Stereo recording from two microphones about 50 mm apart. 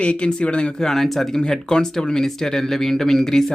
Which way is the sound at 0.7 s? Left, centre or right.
Centre.